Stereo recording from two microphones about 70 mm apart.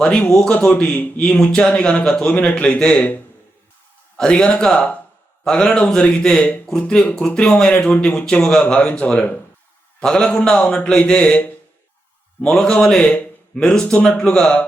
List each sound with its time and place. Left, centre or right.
0.0 s a man's voice: centre
0.7 s a man's voice: centre
4.2 s a man's voice: centre